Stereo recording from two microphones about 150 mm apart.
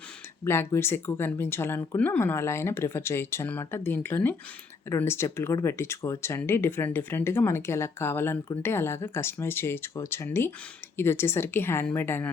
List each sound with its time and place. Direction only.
0.4 s speech: 15° left (ahead or behind)